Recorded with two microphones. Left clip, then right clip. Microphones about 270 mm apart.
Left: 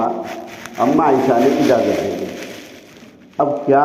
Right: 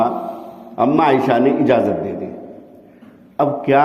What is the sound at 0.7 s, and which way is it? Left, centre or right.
Speech, right.